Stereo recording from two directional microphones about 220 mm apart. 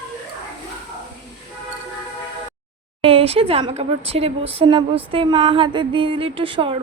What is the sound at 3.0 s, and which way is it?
A woman's voice, 25° right (ahead or behind).